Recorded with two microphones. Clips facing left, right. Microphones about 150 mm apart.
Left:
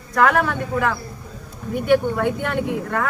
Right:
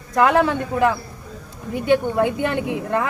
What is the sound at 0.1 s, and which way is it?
A man's voice, 20° right (ahead or behind).